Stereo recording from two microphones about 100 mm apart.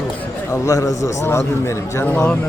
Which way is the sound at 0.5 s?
30° left (ahead or behind).